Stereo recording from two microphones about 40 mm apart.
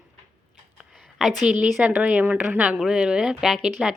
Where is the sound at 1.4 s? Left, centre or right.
Right.